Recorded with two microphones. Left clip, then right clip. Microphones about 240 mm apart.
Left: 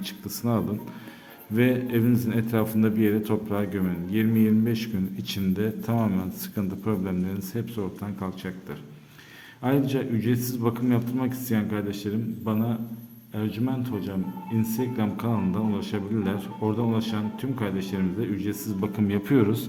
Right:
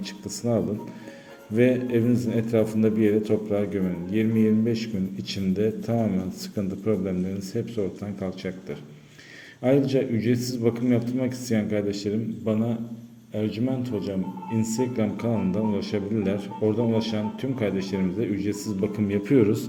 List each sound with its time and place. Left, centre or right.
1.5 s speech: centre
9.6 s speech: centre
13.3 s speech: centre